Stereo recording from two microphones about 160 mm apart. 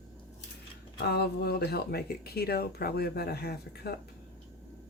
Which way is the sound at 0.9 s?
85° left.